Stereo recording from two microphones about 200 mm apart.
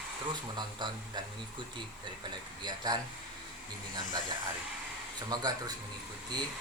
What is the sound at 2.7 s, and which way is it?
Speech, 20° right (ahead or behind).